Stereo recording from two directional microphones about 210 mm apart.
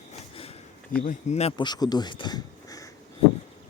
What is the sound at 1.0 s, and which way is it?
Speech, 30° left (ahead or behind).